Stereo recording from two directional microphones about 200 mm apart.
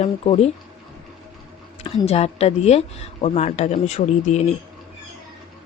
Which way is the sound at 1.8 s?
30° left (ahead or behind).